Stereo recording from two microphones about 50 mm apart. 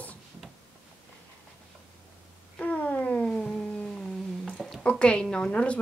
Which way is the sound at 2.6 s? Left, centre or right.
Left.